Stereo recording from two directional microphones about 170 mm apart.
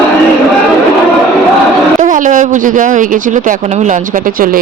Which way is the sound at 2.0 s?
50° right (ahead or behind).